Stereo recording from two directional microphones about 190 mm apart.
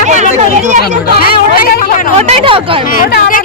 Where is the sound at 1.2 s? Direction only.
50° left (ahead or behind).